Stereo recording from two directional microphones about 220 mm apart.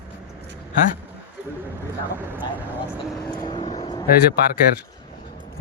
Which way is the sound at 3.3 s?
20° left (ahead or behind).